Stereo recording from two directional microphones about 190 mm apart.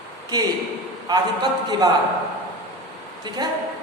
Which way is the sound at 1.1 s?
20° right (ahead or behind).